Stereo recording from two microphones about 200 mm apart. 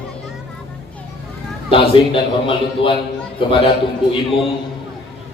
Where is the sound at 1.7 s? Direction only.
25° left (ahead or behind).